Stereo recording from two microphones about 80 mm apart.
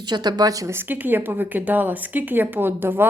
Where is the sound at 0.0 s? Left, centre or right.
Right.